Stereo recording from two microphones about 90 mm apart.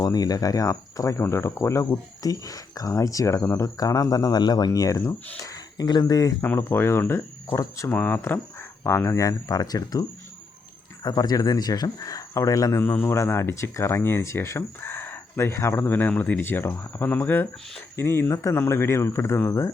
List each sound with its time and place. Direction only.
0.0 s speech: 45° left (ahead or behind); by 3.7 s 30° left (ahead or behind)
3.8 s speech: 45° left (ahead or behind)
6.4 s speech: 25° left (ahead or behind)
12.8 s speech: 25° left (ahead or behind)